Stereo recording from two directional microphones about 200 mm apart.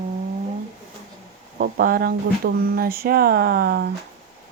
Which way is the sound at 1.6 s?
45° right (ahead or behind).